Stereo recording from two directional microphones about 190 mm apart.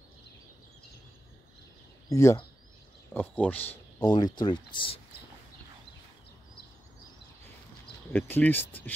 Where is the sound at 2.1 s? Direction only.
15° left (ahead or behind).